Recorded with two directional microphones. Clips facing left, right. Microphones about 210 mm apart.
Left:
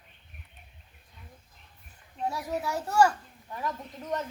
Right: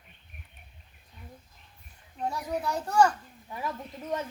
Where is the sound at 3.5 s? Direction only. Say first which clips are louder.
Even; 10° right (ahead or behind).